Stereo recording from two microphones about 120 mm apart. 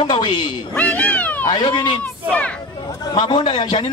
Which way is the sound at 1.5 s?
40° left (ahead or behind).